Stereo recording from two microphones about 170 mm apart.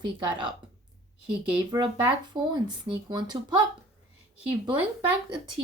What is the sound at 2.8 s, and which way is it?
Speech, 25° right (ahead or behind).